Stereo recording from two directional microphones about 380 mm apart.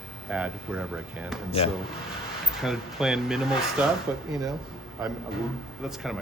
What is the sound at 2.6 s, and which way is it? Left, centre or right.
Speech, centre.